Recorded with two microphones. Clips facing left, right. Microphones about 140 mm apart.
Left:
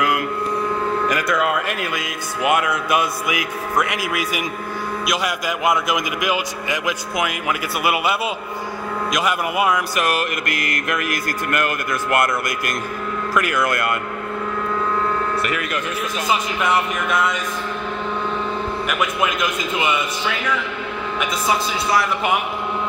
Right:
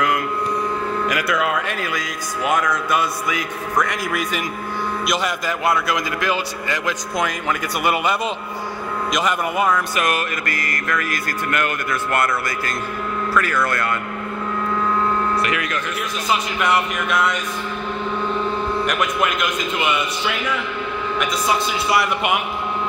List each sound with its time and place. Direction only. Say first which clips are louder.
1.1 s a man's voice: left 1 dB; 5° right (ahead or behind)
5.7 s a man's voice: left 1 dB; 15° left (ahead or behind)
11.5 s a man's voice: left 1 dB; 5° left (ahead or behind)
13.3 s a man's voice: left 1 dB; 15° left (ahead or behind)